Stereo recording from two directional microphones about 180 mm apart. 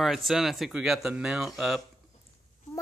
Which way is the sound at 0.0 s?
Centre (ahead or behind).